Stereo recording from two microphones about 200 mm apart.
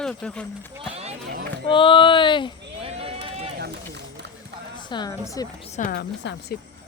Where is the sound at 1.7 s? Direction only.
25° left (ahead or behind).